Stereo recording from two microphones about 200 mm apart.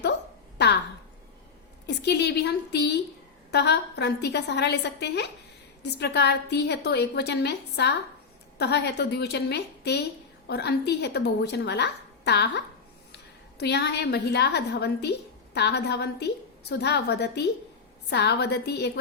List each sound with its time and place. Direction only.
0.6 s a woman's voice: 55° left (ahead or behind)
1.9 s a woman's voice: 55° left (ahead or behind)